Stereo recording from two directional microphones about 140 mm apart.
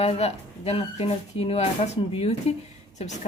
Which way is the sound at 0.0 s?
50° left (ahead or behind).